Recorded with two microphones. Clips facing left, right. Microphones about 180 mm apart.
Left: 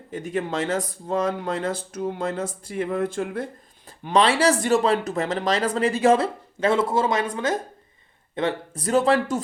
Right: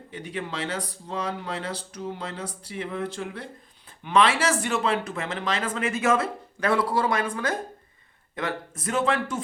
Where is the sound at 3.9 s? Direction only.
35° left (ahead or behind).